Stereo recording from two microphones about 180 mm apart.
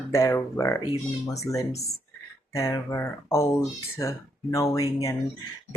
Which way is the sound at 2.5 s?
15° left (ahead or behind).